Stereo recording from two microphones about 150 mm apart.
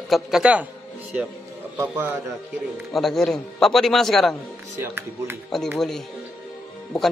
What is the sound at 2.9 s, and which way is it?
Speech, centre (ahead or behind).